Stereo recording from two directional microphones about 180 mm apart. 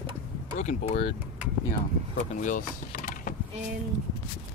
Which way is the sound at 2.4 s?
45° left (ahead or behind).